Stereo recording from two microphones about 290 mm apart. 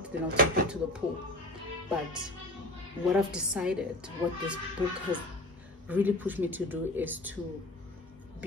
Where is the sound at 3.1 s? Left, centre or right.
Centre.